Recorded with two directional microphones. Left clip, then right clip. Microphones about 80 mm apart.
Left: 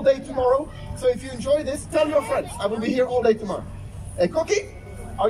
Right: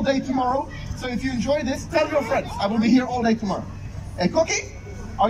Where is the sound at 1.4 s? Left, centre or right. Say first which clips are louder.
Left 1 dB; left.